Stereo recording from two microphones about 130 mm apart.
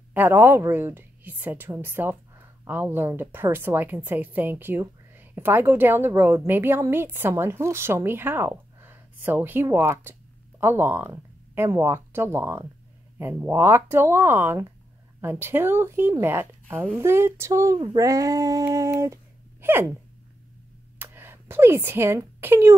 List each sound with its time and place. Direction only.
0.1 s a woman's voice: 15° right (ahead or behind)
19.6 s a sound: 20° right (ahead or behind)
21.0 s speech: 15° right (ahead or behind)